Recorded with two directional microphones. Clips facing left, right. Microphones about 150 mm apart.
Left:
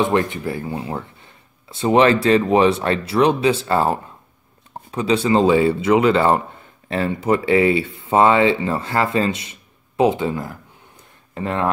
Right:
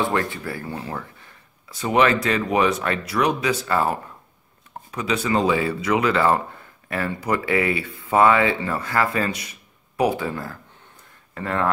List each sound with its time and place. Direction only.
0.0 s speech: 20° left (ahead or behind)